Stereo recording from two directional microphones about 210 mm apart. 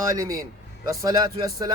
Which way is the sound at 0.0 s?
15° right (ahead or behind).